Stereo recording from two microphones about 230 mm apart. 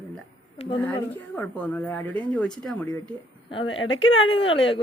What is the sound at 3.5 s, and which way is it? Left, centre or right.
A woman's voice, left.